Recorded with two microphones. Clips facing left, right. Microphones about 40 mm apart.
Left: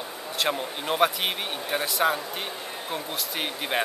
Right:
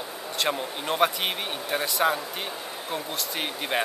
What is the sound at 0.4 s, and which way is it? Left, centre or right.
Speech, centre.